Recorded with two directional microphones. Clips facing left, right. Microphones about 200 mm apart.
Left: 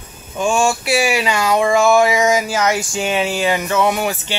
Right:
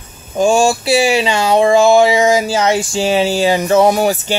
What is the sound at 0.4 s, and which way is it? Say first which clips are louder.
Speech: right 5 dB; 35° right (ahead or behind).